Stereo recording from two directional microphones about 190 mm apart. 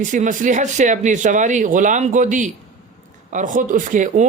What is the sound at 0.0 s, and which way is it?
Speech, 40° right (ahead or behind).